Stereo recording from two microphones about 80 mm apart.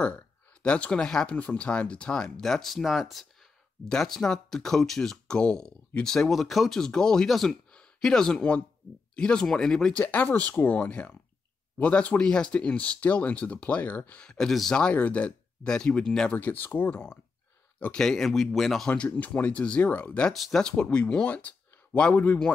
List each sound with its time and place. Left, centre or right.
0.0 s speech: centre
16.3 s speech: left
17.9 s speech: centre
19.0 s speech: centre
20.3 s speech: centre; by 22.4 s left